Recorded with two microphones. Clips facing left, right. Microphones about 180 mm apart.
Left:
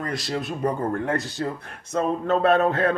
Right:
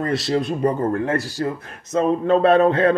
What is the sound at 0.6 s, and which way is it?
A man's voice, 10° right (ahead or behind).